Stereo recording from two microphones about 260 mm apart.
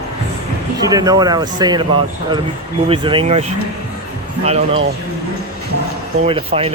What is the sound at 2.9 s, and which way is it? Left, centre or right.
Speech, centre.